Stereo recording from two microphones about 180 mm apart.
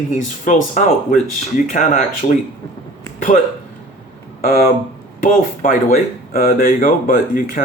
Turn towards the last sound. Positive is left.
turn(degrees=50)  # may be behind; listen again after turning